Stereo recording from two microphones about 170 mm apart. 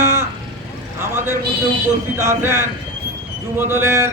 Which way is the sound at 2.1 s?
15° right (ahead or behind).